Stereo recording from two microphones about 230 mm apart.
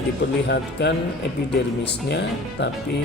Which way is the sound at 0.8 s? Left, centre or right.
Left.